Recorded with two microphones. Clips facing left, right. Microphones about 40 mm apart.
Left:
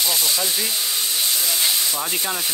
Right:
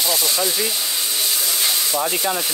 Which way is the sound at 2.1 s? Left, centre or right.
Centre.